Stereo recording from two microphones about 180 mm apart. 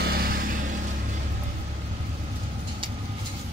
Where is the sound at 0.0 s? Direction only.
60° right (ahead or behind).